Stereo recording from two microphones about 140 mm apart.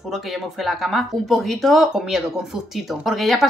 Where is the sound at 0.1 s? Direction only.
Centre (ahead or behind).